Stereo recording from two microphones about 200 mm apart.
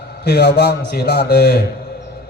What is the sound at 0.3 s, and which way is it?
A man's voice, 55° left (ahead or behind).